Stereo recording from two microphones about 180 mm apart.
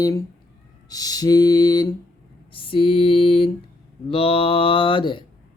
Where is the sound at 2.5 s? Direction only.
30° left (ahead or behind).